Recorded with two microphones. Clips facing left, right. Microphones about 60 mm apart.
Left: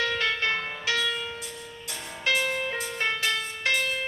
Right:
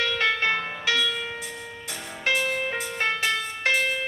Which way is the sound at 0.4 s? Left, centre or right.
Centre.